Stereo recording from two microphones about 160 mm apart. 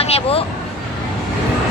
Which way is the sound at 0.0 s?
40° left (ahead or behind).